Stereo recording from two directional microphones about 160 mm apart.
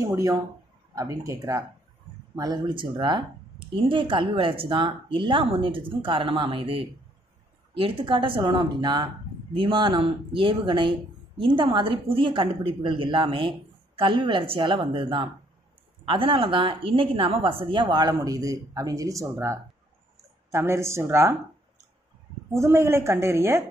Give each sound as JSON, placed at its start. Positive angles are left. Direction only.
{"t": 0.0, "sound": "a woman's voice", "side_deg": -20}
{"t": 22.5, "sound": "a woman's voice", "side_deg": -15}